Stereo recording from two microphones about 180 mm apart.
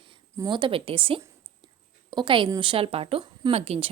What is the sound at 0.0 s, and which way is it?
A woman's voice, 25° right (ahead or behind).